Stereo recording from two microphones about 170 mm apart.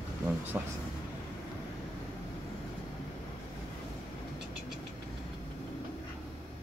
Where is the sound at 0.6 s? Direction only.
10° right (ahead or behind).